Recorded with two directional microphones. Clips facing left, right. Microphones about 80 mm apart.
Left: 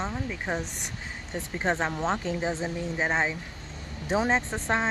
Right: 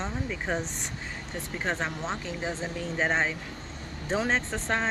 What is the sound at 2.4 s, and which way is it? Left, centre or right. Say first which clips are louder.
Speech: left 3 dB; left.